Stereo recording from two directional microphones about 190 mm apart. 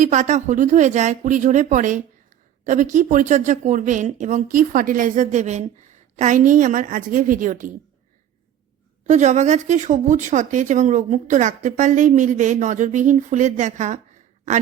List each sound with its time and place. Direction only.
0.0 s speech: 40° right (ahead or behind)
9.0 s speech: 40° right (ahead or behind)